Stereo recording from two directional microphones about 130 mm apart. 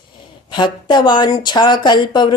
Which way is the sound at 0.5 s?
35° left (ahead or behind).